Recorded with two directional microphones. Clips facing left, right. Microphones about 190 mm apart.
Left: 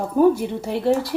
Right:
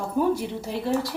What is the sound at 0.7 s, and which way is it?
Speech, 60° left (ahead or behind).